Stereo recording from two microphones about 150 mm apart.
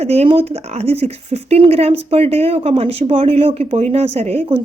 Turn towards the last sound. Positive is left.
turn(degrees=-40)  # may be behind; listen again after turning